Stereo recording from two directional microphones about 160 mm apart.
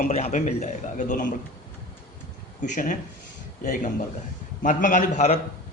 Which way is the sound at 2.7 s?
55° left (ahead or behind).